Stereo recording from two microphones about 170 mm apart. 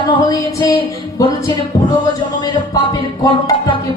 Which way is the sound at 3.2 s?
20° left (ahead or behind).